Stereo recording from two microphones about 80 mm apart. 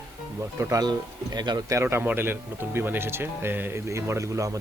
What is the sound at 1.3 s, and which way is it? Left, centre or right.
Speech, right.